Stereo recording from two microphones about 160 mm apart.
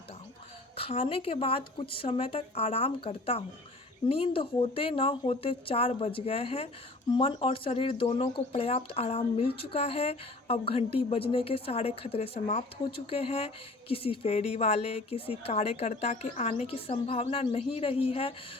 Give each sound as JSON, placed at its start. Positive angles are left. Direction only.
{"t": 0.8, "sound": "speech", "side_deg": 35}